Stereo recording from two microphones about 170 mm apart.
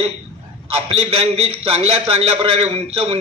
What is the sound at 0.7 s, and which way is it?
A man's voice, 35° right (ahead or behind).